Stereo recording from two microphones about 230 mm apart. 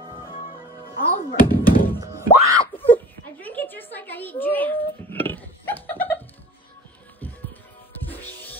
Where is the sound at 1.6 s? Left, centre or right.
Left.